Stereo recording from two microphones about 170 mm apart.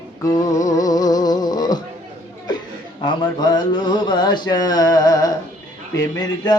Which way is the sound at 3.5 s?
25° left (ahead or behind).